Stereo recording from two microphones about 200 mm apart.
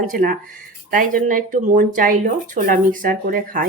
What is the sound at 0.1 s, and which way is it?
Speech, 45° right (ahead or behind).